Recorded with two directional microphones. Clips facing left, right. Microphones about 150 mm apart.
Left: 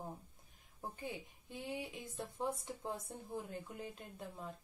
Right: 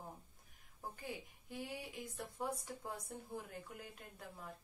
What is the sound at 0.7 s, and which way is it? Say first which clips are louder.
A woman's voice: left 2 dB; 25° left (ahead or behind).